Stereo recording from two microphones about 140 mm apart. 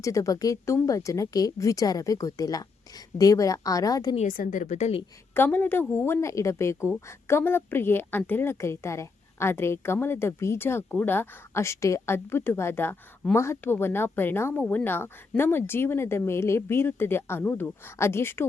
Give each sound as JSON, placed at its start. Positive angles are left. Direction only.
{"t": 0.0, "sound": "a woman's voice", "side_deg": 25}
{"t": 4.3, "sound": "a woman's voice", "side_deg": 75}
{"t": 5.3, "sound": "a woman's voice", "side_deg": 15}